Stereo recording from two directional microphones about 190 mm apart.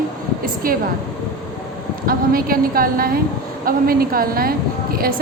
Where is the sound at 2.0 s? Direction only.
50° right (ahead or behind).